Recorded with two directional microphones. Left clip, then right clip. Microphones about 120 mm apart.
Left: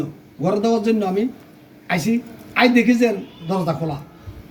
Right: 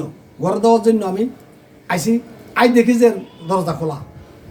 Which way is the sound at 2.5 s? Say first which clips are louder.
Right 2 dB; 40° right (ahead or behind).